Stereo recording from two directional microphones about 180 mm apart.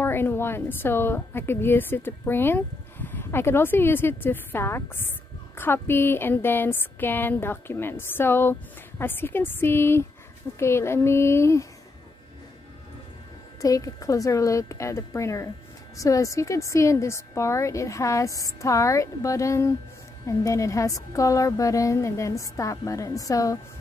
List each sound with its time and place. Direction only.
0.0 s a woman's voice: 10° left (ahead or behind)
13.6 s a woman's voice: 20° left (ahead or behind)